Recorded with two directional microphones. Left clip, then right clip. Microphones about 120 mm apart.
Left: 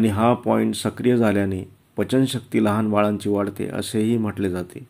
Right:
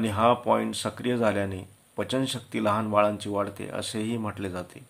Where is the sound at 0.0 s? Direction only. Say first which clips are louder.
Left 3 dB; 30° left (ahead or behind).